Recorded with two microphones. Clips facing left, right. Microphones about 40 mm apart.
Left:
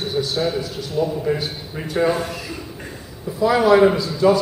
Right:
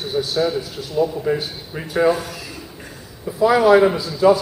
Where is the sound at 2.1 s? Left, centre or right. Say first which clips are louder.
Right 2 dB; left.